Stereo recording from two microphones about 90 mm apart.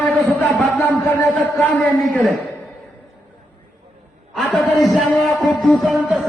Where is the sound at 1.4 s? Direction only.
15° left (ahead or behind).